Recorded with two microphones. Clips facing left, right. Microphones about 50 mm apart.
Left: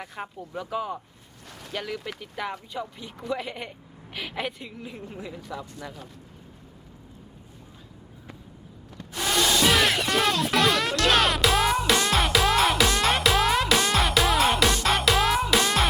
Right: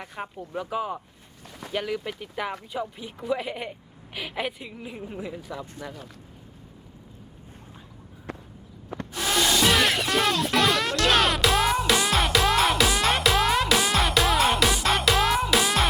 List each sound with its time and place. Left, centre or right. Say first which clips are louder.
0.0 s speech: right 1 dB; centre
8.3 s a sound: right 9 dB; right
9.2 s music: even; centre